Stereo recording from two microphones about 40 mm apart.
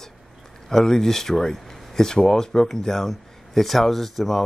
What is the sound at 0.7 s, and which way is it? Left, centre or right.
Speech, centre.